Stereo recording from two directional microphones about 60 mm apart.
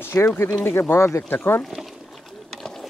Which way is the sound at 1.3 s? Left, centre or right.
Left.